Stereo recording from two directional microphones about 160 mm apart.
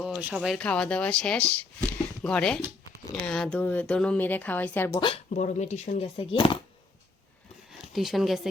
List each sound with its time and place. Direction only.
0.2 s speech: 10° right (ahead or behind); by 4.9 s 10° left (ahead or behind)
4.9 s speech: 35° left (ahead or behind)
5.3 s speech: 50° left (ahead or behind)
6.1 s speech: 30° left (ahead or behind)
7.7 s a sound: centre (ahead or behind)